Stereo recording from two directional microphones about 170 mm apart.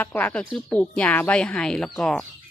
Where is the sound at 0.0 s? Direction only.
10° left (ahead or behind).